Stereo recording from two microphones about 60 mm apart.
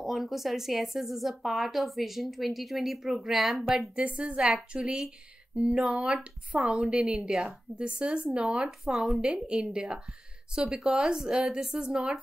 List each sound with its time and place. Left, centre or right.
0.0 s a woman's voice: centre
3.9 s a woman's voice: right
7.7 s a woman's voice: centre
8.9 s a woman's voice: centre
9.2 s a woman's voice: centre